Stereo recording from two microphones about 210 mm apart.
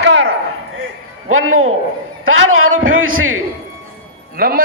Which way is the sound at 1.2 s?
75° right (ahead or behind).